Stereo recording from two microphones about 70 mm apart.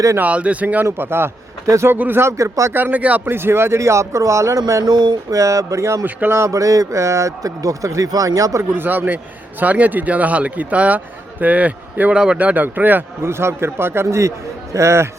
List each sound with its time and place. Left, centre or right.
0.2 s a man's voice: centre
0.9 s speech: right
2.0 s speech: right
2.4 s speech: right
2.7 s speech: right
4.8 s speech: right
5.3 s speech: right
8.7 s a man's voice: right